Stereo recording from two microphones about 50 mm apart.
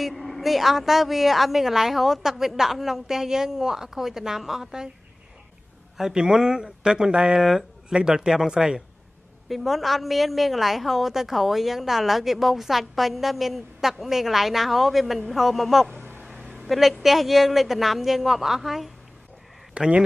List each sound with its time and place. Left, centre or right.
0.0 s a woman's voice: centre
5.9 s a woman's voice: centre
9.5 s a woman's voice: centre
16.4 s a sound: centre
17.0 s a woman's voice: centre
19.7 s speech: centre